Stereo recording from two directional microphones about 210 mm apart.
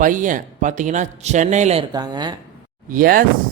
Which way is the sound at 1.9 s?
20° right (ahead or behind).